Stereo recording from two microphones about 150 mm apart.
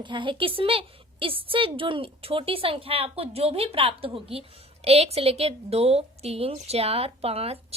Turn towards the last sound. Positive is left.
turn(degrees=-40)  # may be behind; listen again after turning